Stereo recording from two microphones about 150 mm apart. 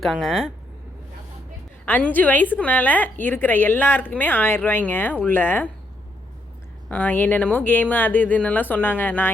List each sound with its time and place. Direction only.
0.0 s speech: centre (ahead or behind)
1.8 s a woman's voice: 10° left (ahead or behind)
6.8 s a woman's voice: 10° left (ahead or behind)